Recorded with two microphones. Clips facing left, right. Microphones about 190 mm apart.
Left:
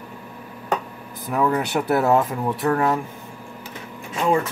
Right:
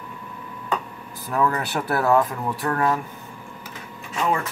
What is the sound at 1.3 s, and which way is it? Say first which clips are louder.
Speech: left 2 dB; 15° left (ahead or behind).